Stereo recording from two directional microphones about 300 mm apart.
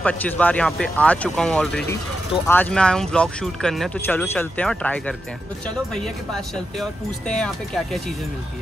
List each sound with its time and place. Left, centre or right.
0.0 s speech: centre